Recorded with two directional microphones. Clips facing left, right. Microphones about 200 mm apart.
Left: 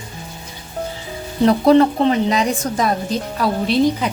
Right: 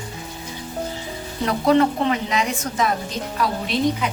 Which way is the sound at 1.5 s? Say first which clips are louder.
Left 5 dB; 35° left (ahead or behind).